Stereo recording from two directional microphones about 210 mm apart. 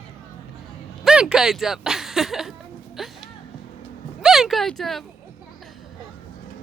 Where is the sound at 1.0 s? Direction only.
5° right (ahead or behind).